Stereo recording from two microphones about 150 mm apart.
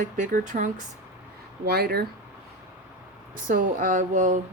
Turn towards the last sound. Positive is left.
turn(degrees=-60)  # may be behind; listen again after turning